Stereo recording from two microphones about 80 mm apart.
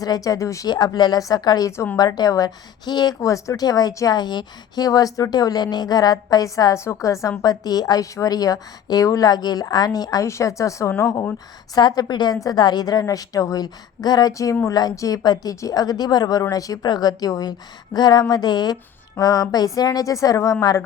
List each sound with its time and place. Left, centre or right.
0.0 s a woman's voice: left
0.7 s a woman's voice: left
3.2 s a woman's voice: left
3.6 s a woman's voice: left
6.7 s a woman's voice: left
10.2 s a woman's voice: left
11.8 s a woman's voice: left
16.5 s a woman's voice: left
16.8 s a woman's voice: left
17.9 s a woman's voice: left
19.2 s a woman's voice: left